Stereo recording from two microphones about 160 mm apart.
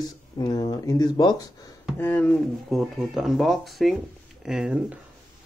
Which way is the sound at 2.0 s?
10° left (ahead or behind).